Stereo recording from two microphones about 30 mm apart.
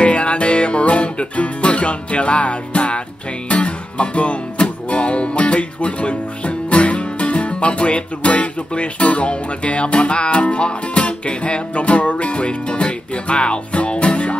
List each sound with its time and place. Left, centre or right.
0.0 s music: left